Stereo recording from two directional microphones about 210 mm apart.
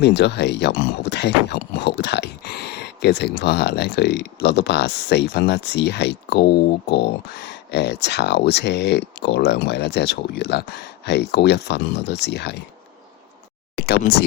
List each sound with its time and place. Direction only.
0.0 s speech: 55° left (ahead or behind)
13.7 s speech: 50° left (ahead or behind)